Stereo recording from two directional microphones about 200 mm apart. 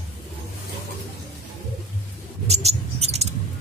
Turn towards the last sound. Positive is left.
turn(degrees=-30)  # may be behind; listen again after turning